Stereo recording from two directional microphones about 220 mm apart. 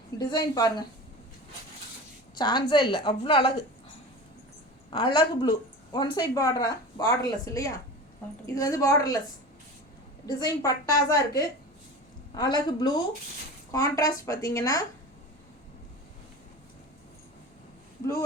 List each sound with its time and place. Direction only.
0.2 s a woman's voice: 20° left (ahead or behind)
2.3 s a woman's voice: 20° left (ahead or behind)
4.9 s a woman's voice: 20° left (ahead or behind)
10.2 s a woman's voice: 15° left (ahead or behind)